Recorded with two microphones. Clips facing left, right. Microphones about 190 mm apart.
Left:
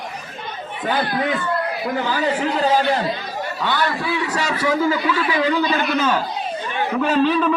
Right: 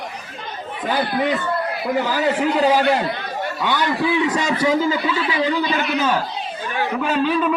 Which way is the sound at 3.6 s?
15° right (ahead or behind).